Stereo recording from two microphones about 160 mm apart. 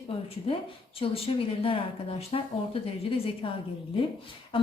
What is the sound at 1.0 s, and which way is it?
A woman's voice, 35° left (ahead or behind).